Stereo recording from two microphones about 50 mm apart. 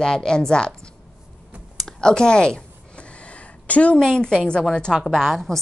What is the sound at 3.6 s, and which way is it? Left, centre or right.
Speech, left.